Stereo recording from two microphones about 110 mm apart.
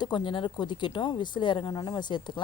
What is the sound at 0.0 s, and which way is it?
A woman's voice, 45° left (ahead or behind).